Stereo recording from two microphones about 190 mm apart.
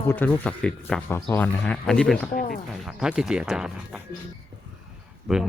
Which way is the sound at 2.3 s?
45° left (ahead or behind).